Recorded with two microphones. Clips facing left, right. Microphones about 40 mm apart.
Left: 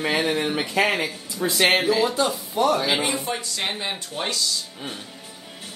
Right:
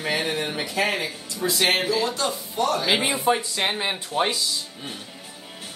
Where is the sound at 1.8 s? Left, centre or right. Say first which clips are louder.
Left 3 dB; centre.